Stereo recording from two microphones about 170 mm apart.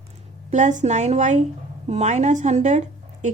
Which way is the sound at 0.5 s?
45° right (ahead or behind).